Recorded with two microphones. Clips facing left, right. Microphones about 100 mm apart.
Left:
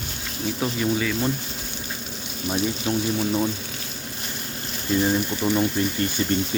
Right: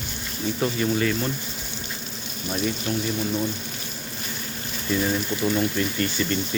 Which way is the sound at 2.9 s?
35° left (ahead or behind).